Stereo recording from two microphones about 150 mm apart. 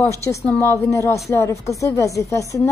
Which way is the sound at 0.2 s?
15° left (ahead or behind).